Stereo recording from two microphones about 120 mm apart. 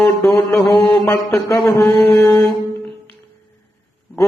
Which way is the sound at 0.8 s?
25° left (ahead or behind).